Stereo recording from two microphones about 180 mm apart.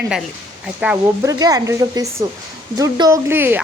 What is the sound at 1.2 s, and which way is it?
Speech, 20° right (ahead or behind).